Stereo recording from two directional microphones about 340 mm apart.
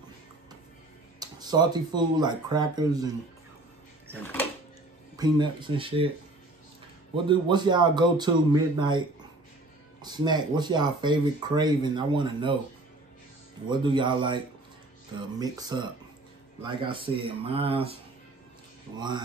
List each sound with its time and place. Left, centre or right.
1.2 s speech: centre
4.2 s a sound: centre
5.1 s speech: centre
7.2 s speech: centre
10.0 s speech: centre
13.7 s speech: centre
18.9 s speech: centre